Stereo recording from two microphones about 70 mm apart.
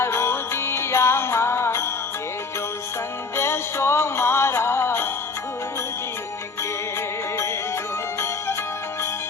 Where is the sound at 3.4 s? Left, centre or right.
Left.